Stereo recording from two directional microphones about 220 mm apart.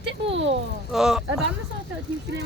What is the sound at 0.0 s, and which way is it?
Speech, 55° right (ahead or behind).